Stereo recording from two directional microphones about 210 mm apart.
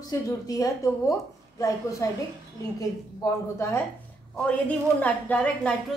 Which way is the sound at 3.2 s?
15° left (ahead or behind).